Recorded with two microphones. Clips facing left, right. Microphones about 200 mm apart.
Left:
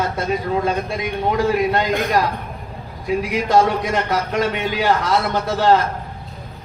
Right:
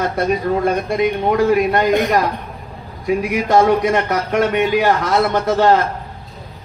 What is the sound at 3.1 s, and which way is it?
A man's voice, 60° right (ahead or behind).